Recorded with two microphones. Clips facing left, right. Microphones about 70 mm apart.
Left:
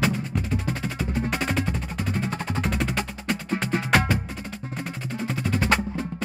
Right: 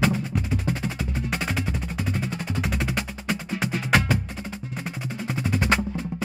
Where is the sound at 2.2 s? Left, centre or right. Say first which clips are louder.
Left 1 dB; left.